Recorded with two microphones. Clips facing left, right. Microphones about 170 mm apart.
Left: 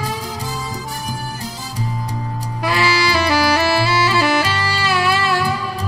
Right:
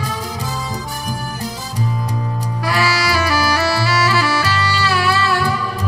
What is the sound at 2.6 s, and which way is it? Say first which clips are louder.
Saxophone: left 1 dB; 25° left (ahead or behind).